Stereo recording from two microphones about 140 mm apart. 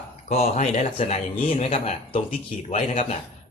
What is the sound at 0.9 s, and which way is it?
A man's voice, 45° left (ahead or behind).